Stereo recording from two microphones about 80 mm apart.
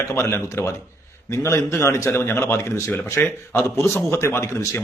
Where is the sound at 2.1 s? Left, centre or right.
Left.